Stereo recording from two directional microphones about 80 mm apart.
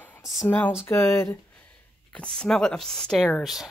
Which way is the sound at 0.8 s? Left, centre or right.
Left.